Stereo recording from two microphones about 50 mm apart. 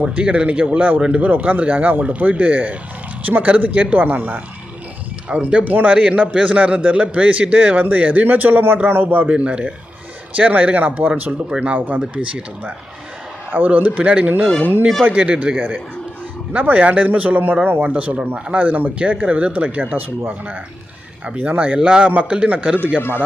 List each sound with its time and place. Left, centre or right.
0.0 s a man's voice: right
9.3 s speech: right
10.3 s a man's voice: right
13.5 s a man's voice: right
17.8 s a man's voice: right
21.8 s speech: right
23.0 s speech: left